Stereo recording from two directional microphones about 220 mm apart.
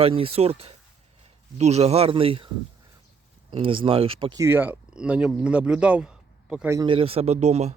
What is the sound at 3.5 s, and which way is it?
Speech, 25° right (ahead or behind).